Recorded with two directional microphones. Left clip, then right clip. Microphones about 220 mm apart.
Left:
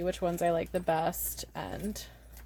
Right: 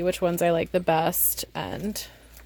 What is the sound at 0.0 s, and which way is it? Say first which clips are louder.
Speech: right 7 dB; 40° right (ahead or behind).